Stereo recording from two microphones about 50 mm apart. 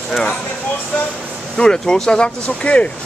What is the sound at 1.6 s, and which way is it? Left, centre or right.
Speech, centre.